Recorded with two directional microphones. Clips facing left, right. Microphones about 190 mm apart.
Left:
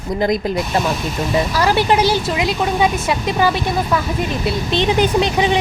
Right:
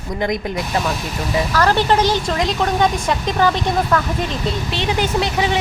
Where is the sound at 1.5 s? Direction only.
10° left (ahead or behind).